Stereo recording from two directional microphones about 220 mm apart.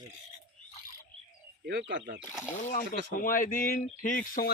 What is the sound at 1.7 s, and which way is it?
Speech, 50° right (ahead or behind).